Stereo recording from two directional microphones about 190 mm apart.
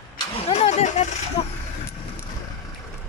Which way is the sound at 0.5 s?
35° left (ahead or behind).